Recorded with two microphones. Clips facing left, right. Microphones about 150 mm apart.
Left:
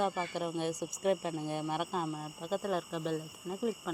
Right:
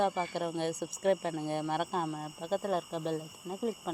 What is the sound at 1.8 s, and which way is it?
Speech, 50° right (ahead or behind).